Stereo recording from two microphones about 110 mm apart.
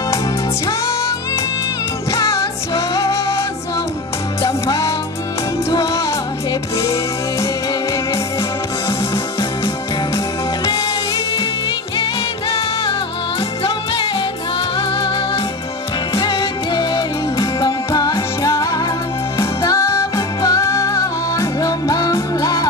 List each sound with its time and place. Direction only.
2.1 s music: 30° left (ahead or behind)
4.4 s music: 30° left (ahead or behind)
10.1 s music: 35° left (ahead or behind)
12.0 s music: 55° left (ahead or behind)
14.8 s music: 50° left (ahead or behind); by 22.7 s 35° left (ahead or behind)